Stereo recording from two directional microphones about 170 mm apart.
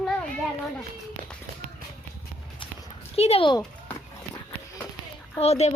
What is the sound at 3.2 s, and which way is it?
Speech, 35° left (ahead or behind).